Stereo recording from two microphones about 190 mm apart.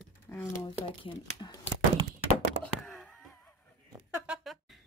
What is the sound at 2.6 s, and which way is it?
Wail, centre (ahead or behind).